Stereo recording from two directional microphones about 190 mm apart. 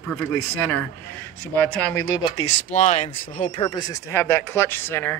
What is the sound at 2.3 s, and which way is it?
Speech, 40° left (ahead or behind).